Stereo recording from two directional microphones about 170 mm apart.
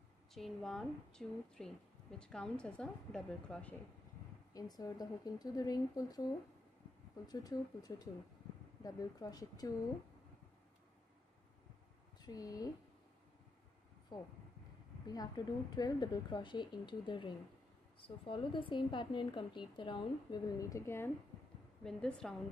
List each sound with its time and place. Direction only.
0.3 s a woman's voice: centre (ahead or behind)
4.6 s a woman's voice: 20° left (ahead or behind)
12.2 s speech: 20° left (ahead or behind)
14.1 s a woman's voice: 20° left (ahead or behind)
21.8 s a woman's voice: 5° left (ahead or behind)